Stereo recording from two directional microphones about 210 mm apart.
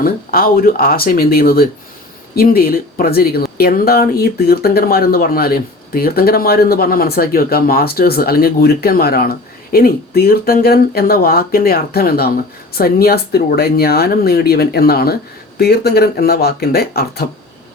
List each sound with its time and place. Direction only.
0.0 s speech: 45° left (ahead or behind)